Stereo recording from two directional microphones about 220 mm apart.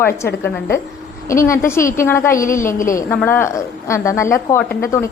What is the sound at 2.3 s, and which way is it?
Speech, 40° left (ahead or behind).